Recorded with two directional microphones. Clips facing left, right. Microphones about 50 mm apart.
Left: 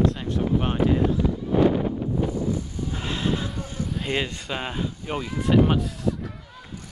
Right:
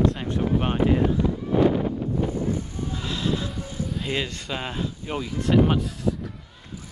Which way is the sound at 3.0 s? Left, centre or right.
Left.